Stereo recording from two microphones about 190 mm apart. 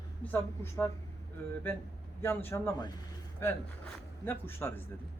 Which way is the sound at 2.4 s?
15° left (ahead or behind).